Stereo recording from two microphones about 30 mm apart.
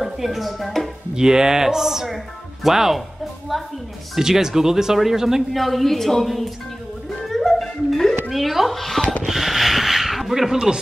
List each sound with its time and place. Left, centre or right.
0.0 s speech: centre
1.1 s speech: centre
4.2 s speech: centre
5.5 s a woman's voice: centre
7.2 s music: centre
8.3 s a woman's voice: centre
9.2 s speech: centre